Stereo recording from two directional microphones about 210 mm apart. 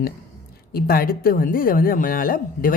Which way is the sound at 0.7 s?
45° left (ahead or behind).